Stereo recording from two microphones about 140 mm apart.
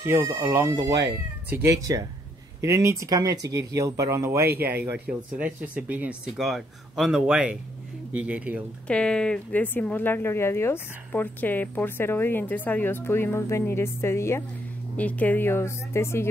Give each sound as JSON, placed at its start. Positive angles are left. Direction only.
{"t": 0.0, "sound": "speech", "side_deg": -20}
{"t": 8.8, "sound": "speech", "side_deg": 5}